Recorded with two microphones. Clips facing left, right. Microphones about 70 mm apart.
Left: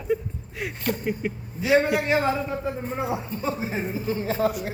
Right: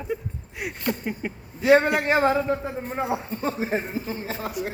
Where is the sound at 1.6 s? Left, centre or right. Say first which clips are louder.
Right 3 dB; right.